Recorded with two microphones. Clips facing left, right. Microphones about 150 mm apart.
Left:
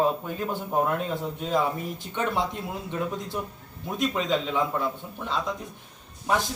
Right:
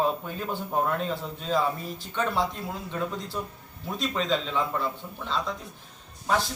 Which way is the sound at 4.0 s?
10° left (ahead or behind).